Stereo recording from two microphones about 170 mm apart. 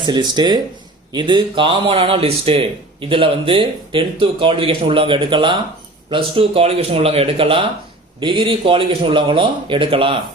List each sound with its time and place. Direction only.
0.0 s speech: 25° right (ahead or behind)